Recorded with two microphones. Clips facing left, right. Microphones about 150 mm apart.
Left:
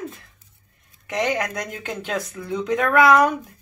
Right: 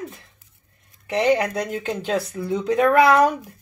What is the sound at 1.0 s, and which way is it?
A woman's voice, 30° right (ahead or behind).